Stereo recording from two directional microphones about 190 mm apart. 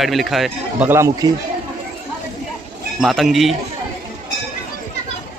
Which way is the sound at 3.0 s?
Centre (ahead or behind).